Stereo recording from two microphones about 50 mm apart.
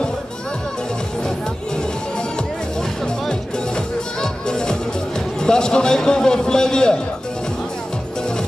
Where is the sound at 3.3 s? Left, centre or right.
Centre.